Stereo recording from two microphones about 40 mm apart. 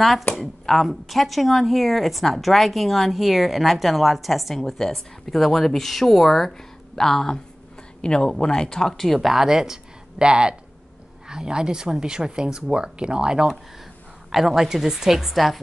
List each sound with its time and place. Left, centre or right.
0.4 s a woman's voice: centre
4.7 s a woman's voice: centre
8.9 s a woman's voice: centre
9.3 s speech: centre
14.3 s a woman's voice: centre